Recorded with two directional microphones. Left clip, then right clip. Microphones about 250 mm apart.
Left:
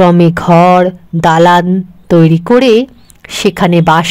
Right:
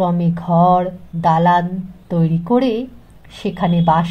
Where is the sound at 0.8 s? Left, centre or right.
Left.